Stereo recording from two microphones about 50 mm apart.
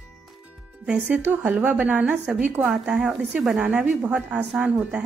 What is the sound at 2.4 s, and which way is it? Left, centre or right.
Speech, right.